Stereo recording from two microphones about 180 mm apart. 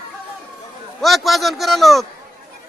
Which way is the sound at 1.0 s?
Centre (ahead or behind).